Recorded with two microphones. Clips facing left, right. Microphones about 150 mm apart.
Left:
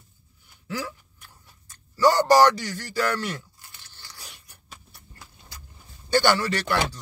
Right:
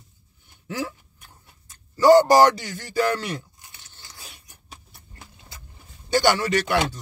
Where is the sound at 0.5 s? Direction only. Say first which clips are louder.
Right 2 dB; 20° right (ahead or behind).